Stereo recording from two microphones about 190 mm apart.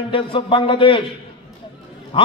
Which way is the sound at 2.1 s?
25° left (ahead or behind).